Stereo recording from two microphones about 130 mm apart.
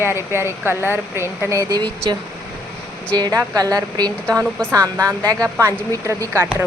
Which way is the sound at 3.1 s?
30° right (ahead or behind).